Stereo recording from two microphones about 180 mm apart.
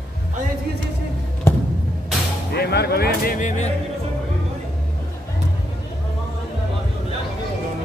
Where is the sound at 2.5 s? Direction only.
65° left (ahead or behind); by 3.6 s 45° left (ahead or behind).